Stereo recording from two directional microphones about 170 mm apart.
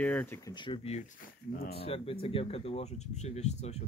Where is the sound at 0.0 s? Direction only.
10° left (ahead or behind).